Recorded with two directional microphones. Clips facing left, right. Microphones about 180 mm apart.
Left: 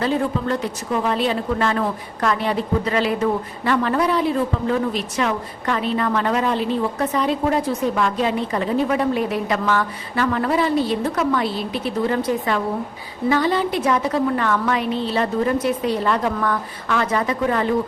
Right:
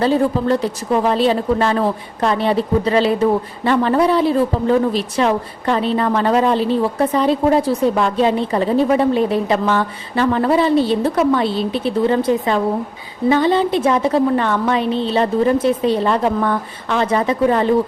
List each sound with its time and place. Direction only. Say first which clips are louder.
0.0 s a woman's voice: right 5 dB; 35° right (ahead or behind)